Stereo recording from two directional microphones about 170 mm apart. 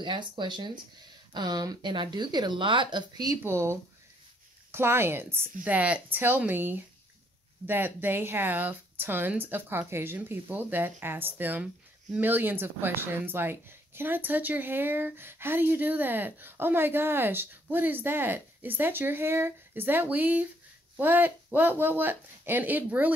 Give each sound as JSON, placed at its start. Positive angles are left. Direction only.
{"t": 0.0, "sound": "speech", "side_deg": -25}